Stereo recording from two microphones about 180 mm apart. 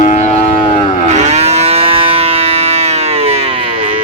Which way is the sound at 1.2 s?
40° right (ahead or behind).